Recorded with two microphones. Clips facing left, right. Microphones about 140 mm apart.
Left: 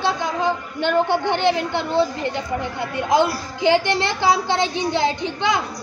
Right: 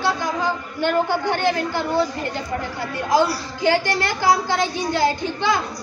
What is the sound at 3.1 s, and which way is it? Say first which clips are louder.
A woman's voice: even; 20° left (ahead or behind).